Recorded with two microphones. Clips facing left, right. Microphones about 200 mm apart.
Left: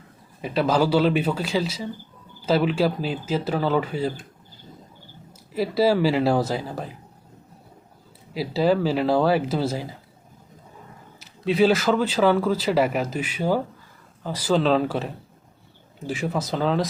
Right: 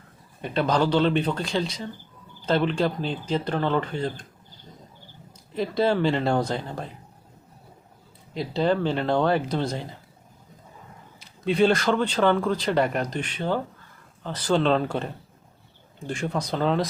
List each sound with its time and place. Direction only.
0.4 s speech: 5° left (ahead or behind)
5.5 s speech: 5° left (ahead or behind)
8.3 s speech: 5° left (ahead or behind)
11.2 s speech: centre (ahead or behind)